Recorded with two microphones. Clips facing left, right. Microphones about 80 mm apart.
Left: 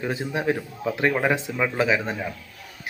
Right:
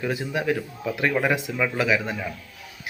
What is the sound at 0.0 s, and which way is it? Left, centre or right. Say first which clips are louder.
A man's voice: even; left.